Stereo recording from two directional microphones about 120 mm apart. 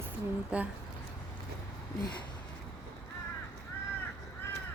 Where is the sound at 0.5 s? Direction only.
10° right (ahead or behind).